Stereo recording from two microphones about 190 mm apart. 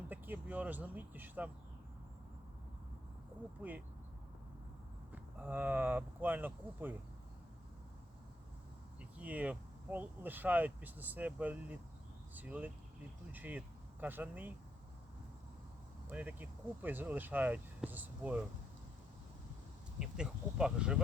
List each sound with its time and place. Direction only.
0.1 s speech: 10° right (ahead or behind)
3.6 s speech: 10° right (ahead or behind)
5.1 s speech: 10° right (ahead or behind)
9.0 s speech: 5° right (ahead or behind)
16.0 s speech: 10° right (ahead or behind)
20.0 s speech: 5° right (ahead or behind)